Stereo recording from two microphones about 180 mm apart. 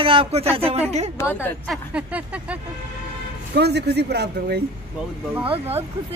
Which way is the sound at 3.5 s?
65° right (ahead or behind).